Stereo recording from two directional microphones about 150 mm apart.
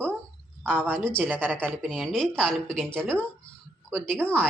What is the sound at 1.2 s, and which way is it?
Speech, 10° right (ahead or behind).